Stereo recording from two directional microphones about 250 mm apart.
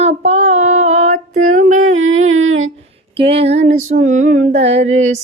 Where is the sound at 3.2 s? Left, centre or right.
Right.